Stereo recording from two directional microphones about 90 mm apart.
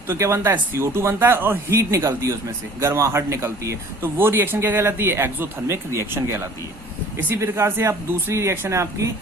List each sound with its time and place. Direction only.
0.1 s speech: 35° right (ahead or behind)